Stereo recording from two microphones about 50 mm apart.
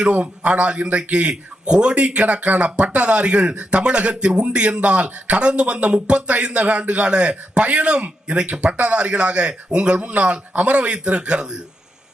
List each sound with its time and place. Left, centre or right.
0.0 s speech: right